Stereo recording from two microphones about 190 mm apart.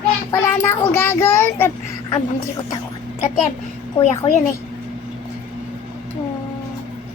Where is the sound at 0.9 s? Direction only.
10° left (ahead or behind).